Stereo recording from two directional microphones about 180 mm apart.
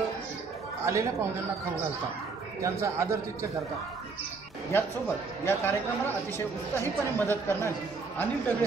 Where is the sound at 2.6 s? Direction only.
15° right (ahead or behind).